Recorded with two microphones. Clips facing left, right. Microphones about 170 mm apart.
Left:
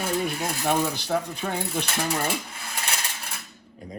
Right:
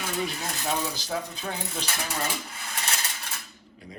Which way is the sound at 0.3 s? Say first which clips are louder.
Left 5 dB; 60° left (ahead or behind).